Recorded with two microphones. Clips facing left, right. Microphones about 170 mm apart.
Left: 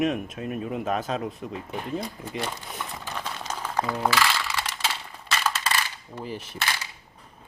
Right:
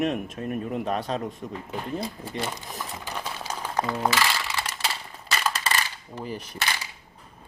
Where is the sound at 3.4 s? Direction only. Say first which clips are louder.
Even; 10° right (ahead or behind).